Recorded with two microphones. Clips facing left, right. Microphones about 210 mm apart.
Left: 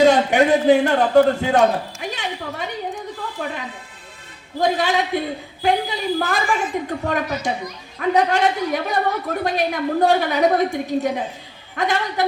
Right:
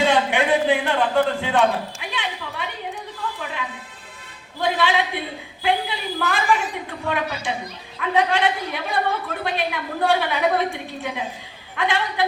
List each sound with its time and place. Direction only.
0.0 s a man's voice: 40° left (ahead or behind)
4.6 s a woman's voice: 40° left (ahead or behind)